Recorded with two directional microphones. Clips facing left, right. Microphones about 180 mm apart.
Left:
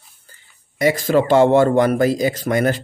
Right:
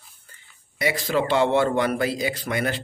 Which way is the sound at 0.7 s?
45° left (ahead or behind).